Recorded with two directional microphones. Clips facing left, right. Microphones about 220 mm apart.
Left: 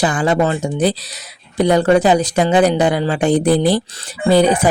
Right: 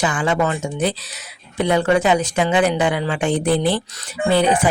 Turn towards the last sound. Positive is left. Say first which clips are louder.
# left 4 dB
turn(degrees=40)  # may be behind; listen again after turning